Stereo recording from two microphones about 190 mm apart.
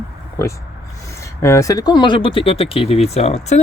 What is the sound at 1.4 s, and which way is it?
Speech, 15° left (ahead or behind).